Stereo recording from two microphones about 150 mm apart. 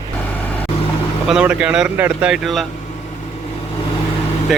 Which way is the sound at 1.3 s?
5° right (ahead or behind).